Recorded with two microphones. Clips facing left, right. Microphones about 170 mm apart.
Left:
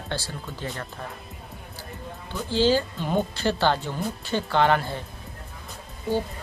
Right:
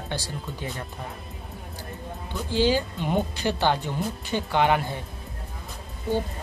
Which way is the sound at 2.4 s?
15° right (ahead or behind).